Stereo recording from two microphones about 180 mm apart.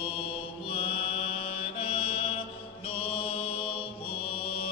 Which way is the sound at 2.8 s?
30° left (ahead or behind).